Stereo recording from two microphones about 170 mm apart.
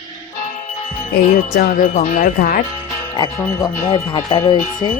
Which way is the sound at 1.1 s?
55° left (ahead or behind).